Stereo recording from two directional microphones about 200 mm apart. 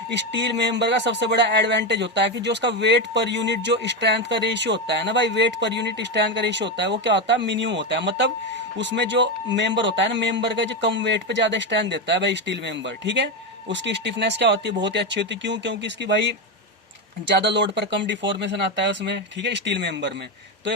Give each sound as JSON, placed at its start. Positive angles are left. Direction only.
{"t": 0.1, "sound": "speech", "side_deg": -60}